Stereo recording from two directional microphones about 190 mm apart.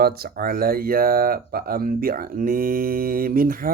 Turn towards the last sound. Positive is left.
turn(degrees=-50)  # may be behind; listen again after turning